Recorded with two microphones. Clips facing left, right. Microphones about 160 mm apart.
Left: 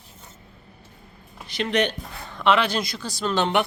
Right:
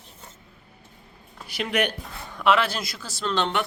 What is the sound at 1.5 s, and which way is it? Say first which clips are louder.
A man's voice: left 2 dB; 5° right (ahead or behind).